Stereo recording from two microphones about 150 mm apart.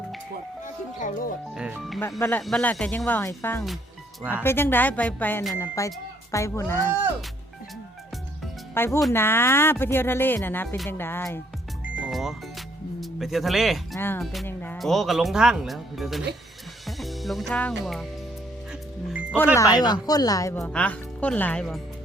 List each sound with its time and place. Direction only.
0.6 s speech: 60° left (ahead or behind)
1.5 s speech: 5° right (ahead or behind)
2.0 s speech: 20° left (ahead or behind)
2.4 s speech: 5° left (ahead or behind)
4.2 s speech: 15° right (ahead or behind)
4.4 s speech: 15° left (ahead or behind)
8.7 s speech: 15° left (ahead or behind)
11.9 s speech: 5° right (ahead or behind)
13.9 s speech: 15° left (ahead or behind)
14.4 s music: 15° left (ahead or behind)
14.8 s speech: centre (ahead or behind)
18.7 s music: 5° right (ahead or behind)
19.5 s speech: 25° left (ahead or behind)
20.6 s speech: 5° left (ahead or behind)